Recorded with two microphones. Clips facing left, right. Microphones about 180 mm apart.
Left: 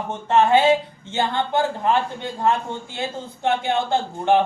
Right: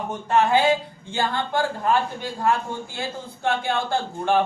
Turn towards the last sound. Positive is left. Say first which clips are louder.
# left 3 dB
turn(degrees=20)  # may be behind; listen again after turning